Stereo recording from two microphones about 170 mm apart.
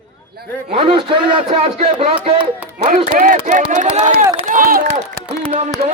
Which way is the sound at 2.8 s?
50° right (ahead or behind).